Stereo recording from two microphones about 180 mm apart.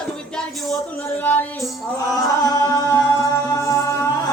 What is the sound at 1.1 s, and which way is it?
Music, 10° left (ahead or behind).